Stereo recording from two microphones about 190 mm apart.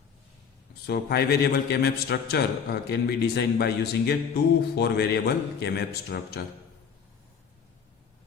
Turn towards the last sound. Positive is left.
turn(degrees=60)  # may be behind; listen again after turning